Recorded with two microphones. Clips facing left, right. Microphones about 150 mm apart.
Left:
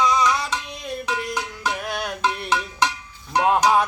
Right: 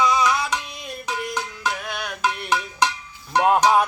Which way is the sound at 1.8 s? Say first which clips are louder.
Left 3 dB; 35° left (ahead or behind).